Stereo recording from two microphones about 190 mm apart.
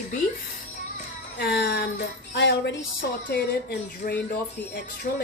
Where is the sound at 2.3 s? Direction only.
65° left (ahead or behind).